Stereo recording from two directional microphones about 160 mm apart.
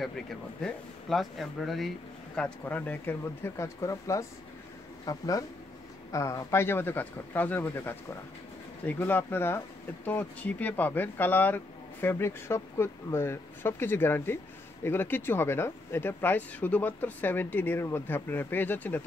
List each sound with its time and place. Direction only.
0.7 s speech: centre (ahead or behind)